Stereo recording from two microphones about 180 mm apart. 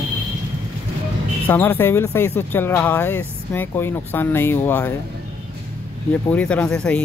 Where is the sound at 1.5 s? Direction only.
10° left (ahead or behind).